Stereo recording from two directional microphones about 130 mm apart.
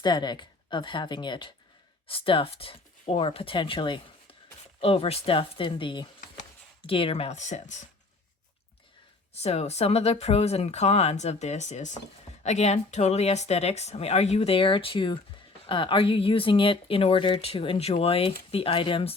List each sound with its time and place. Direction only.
0.0 s speech: 35° left (ahead or behind)
4.8 s speech: 50° left (ahead or behind); by 7.9 s 65° left (ahead or behind)
9.3 s speech: 55° left (ahead or behind)